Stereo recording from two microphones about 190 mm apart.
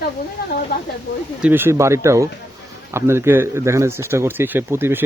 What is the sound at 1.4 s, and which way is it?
Speech, 10° right (ahead or behind).